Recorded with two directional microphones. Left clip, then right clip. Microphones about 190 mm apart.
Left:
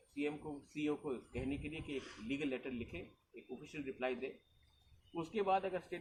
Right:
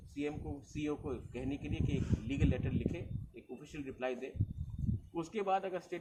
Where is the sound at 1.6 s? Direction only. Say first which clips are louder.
Right 4 dB; 60° right (ahead or behind).